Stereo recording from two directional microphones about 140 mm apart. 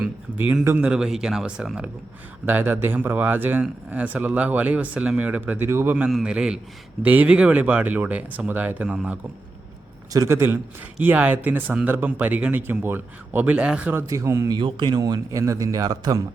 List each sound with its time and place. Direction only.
0.6 s speech: 20° right (ahead or behind)
0.9 s speech: 5° right (ahead or behind)
10.1 s speech: 20° right (ahead or behind)
14.1 s speech: 20° right (ahead or behind)
14.6 s speech: 35° right (ahead or behind)